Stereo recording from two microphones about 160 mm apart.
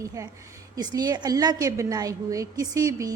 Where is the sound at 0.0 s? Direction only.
20° right (ahead or behind).